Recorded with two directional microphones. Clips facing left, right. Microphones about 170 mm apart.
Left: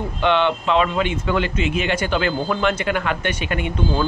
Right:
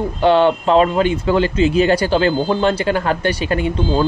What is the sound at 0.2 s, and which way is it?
A man's voice, 40° right (ahead or behind).